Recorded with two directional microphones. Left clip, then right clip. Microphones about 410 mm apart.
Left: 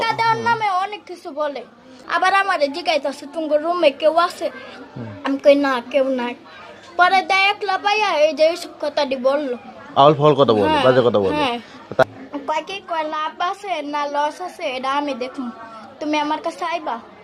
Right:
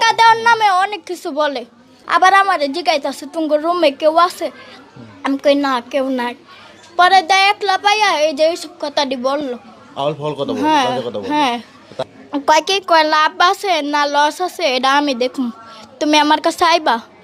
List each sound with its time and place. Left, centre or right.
0.0 s a sound: right
2.0 s a woman's voice: right
9.9 s a man's voice: left
10.6 s a woman's voice: right
10.9 s a man's voice: left
11.3 s a woman's voice: right
12.3 s a woman's voice: right